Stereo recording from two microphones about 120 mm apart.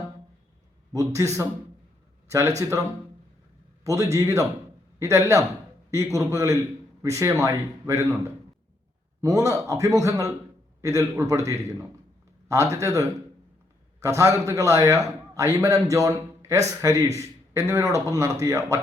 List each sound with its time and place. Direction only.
0.9 s a man's voice: 25° right (ahead or behind)
2.6 s a man's voice: 25° right (ahead or behind)
3.8 s a man's voice: 25° right (ahead or behind)
10.8 s a sound: 25° right (ahead or behind)
11.1 s a man's voice: 25° right (ahead or behind)